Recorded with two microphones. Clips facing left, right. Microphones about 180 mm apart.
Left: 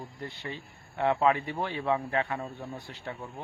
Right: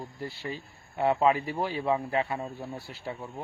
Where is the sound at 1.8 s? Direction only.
10° right (ahead or behind).